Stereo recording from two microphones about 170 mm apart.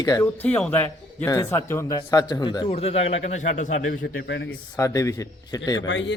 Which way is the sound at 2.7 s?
35° left (ahead or behind).